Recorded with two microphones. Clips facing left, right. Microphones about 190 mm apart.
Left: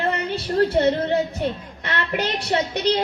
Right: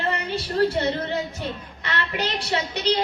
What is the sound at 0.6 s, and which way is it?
A woman's voice, 55° left (ahead or behind).